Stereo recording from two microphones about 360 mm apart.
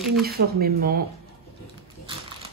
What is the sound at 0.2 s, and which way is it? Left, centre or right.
Speech, right.